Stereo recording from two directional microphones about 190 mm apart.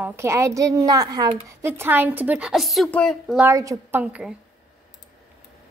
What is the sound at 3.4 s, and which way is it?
Speech, 15° right (ahead or behind).